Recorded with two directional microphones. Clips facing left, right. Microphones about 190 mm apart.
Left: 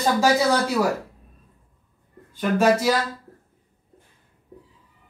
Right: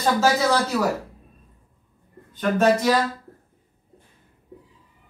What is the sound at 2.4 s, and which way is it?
Speech, 10° left (ahead or behind).